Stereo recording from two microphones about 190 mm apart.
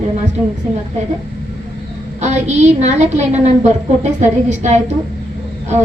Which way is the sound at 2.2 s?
35° right (ahead or behind).